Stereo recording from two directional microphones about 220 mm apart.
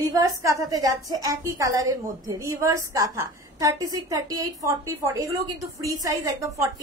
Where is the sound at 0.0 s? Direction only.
15° right (ahead or behind).